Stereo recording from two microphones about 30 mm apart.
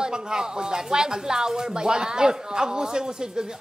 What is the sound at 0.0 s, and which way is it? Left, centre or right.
Speech, right.